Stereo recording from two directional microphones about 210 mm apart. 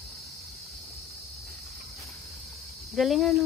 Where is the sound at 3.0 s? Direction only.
Centre (ahead or behind).